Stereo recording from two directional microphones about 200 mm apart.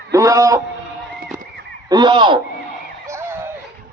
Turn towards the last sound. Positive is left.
turn(degrees=-10)  # may be behind; listen again after turning